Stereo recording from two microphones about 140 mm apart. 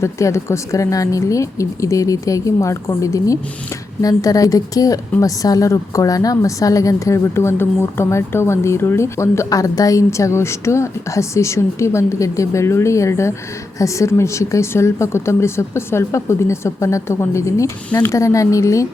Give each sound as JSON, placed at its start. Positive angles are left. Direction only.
{"t": 0.0, "sound": "a woman's voice", "side_deg": 20}